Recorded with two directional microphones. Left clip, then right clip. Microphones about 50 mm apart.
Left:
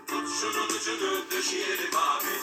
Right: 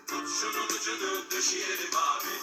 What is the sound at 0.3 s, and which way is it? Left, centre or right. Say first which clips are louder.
Music: left 1 dB; right.